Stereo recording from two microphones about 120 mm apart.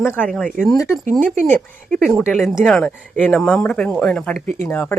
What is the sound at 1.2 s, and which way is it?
Speech, 15° left (ahead or behind).